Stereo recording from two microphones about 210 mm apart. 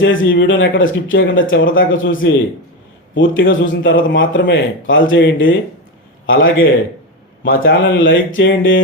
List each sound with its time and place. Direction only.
0.0 s a man's voice: 65° left (ahead or behind)